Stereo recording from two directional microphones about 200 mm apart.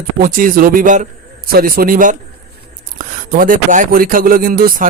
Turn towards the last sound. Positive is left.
turn(degrees=-45)  # may be behind; listen again after turning